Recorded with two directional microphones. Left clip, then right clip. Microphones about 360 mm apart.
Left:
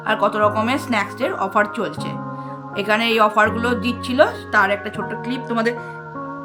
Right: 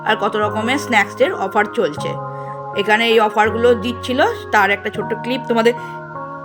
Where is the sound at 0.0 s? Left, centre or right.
Centre.